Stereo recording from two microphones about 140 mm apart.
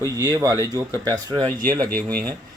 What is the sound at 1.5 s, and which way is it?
Speech, 85° right.